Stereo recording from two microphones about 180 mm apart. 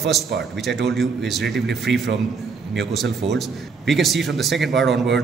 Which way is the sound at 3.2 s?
35° right (ahead or behind).